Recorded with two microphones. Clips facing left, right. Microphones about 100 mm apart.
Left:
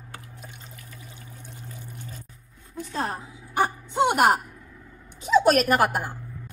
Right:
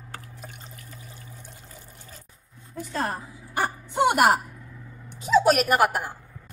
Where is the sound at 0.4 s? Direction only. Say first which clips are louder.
Right 1 dB; 50° right (ahead or behind).